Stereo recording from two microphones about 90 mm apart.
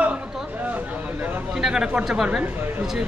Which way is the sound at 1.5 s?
5° right (ahead or behind).